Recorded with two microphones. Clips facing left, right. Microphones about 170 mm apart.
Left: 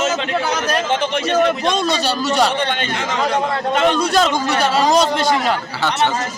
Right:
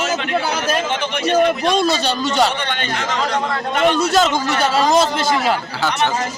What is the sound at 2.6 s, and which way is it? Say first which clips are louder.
Speech: left 2 dB; 30° left (ahead or behind).